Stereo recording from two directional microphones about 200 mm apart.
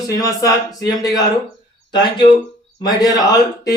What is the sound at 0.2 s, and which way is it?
A man's voice, 15° left (ahead or behind).